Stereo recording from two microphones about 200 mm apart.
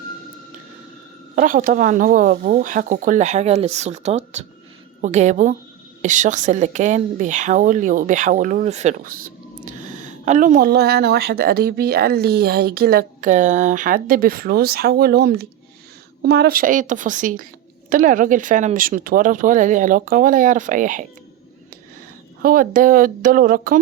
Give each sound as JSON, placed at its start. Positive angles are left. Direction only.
{"t": 1.4, "sound": "a woman's voice", "side_deg": -45}
{"t": 22.4, "sound": "speech", "side_deg": -45}